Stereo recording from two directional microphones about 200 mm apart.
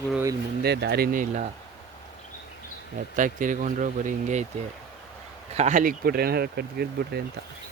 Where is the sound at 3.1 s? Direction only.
40° right (ahead or behind).